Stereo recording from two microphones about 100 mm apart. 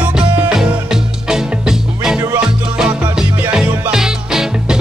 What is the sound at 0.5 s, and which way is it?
Music, 5° right (ahead or behind).